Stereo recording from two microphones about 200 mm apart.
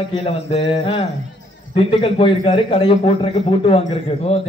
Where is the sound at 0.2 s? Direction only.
30° left (ahead or behind).